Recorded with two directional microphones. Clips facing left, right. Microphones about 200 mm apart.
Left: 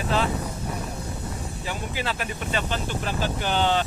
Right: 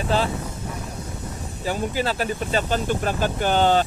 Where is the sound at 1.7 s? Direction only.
40° right (ahead or behind).